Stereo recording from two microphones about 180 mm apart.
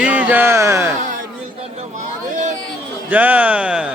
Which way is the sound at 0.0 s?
10° right (ahead or behind).